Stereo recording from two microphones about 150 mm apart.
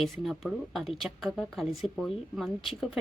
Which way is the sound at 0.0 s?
Centre (ahead or behind).